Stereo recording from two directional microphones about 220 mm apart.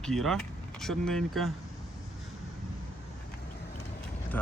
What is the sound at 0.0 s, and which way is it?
Speech, centre (ahead or behind).